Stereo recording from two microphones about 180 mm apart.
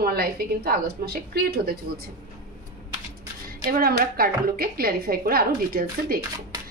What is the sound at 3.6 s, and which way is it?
A woman's voice, 55° right (ahead or behind).